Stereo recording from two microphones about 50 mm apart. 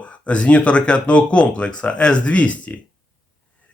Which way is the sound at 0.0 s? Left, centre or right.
Left.